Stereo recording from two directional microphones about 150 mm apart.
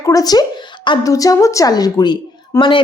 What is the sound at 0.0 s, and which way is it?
A woman's voice, 25° left (ahead or behind).